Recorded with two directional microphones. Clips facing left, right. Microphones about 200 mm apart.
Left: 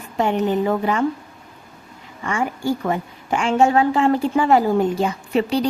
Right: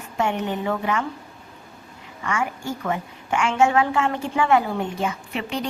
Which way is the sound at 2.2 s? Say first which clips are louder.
Left 5 dB; 35° left (ahead or behind).